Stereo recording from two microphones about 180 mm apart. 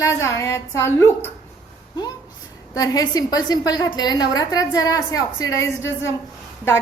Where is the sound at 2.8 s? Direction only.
20° left (ahead or behind).